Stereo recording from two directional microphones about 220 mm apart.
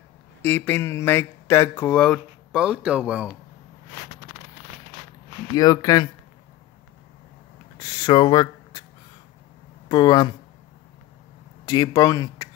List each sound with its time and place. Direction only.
0.4 s speech: 10° left (ahead or behind)
2.5 s speech: 5° right (ahead or behind)
5.5 s speech: 15° left (ahead or behind)
7.8 s a sound: 20° left (ahead or behind)
9.8 s speech: 20° left (ahead or behind)
11.6 s speech: 15° left (ahead or behind)